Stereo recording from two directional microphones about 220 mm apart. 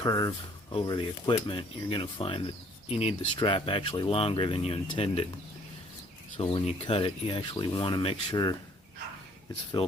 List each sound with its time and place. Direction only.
0.0 s speech: 15° left (ahead or behind)
6.3 s speech: 25° left (ahead or behind)